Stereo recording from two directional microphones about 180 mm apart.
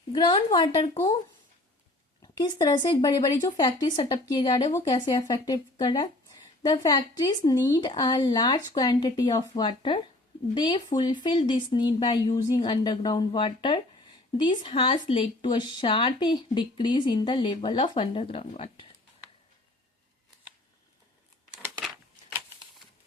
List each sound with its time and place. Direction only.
0.1 s speech: 25° left (ahead or behind)
2.2 s speech: 20° left (ahead or behind)